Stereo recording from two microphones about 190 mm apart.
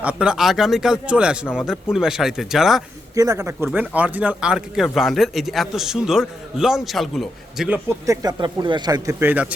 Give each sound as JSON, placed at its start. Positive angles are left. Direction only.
{"t": 0.0, "sound": "speech", "side_deg": -5}
{"t": 3.2, "sound": "speech", "side_deg": -15}
{"t": 7.9, "sound": "speech", "side_deg": -15}